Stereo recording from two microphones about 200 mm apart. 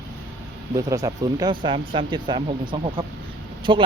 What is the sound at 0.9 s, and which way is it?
Speech, 15° right (ahead or behind).